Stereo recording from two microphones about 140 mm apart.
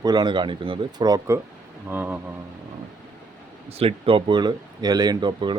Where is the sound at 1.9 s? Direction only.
15° right (ahead or behind).